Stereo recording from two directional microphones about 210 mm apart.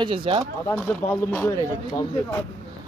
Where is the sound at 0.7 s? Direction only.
10° left (ahead or behind).